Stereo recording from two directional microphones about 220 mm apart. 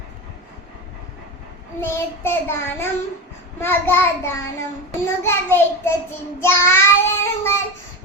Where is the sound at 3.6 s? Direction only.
10° left (ahead or behind).